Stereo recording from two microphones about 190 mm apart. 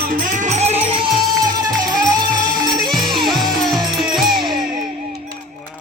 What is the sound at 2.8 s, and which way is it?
Music, centre (ahead or behind).